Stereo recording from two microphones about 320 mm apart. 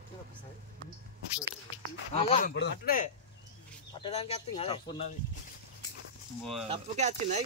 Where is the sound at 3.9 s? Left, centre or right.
Centre.